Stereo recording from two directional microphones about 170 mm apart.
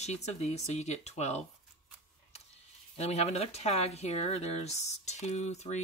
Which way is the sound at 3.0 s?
40° left (ahead or behind).